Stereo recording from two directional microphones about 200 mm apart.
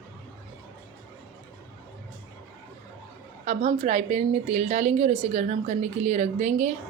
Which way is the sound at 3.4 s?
30° right (ahead or behind).